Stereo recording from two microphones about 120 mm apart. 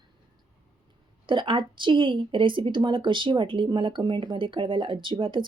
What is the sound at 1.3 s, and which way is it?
A woman's voice, 45° right (ahead or behind).